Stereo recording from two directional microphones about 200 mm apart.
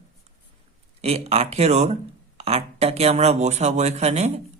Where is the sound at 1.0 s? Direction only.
30° right (ahead or behind).